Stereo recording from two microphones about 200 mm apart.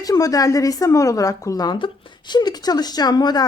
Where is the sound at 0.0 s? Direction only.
15° left (ahead or behind).